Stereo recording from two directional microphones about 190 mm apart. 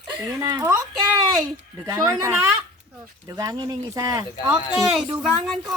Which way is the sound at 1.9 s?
20° right (ahead or behind).